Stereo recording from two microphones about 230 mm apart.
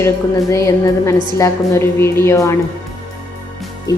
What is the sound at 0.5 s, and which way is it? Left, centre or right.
A woman's voice, centre.